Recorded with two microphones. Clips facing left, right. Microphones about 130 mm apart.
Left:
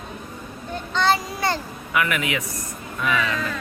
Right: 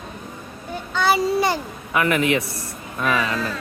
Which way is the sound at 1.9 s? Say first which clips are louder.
Right 4 dB; 35° right (ahead or behind).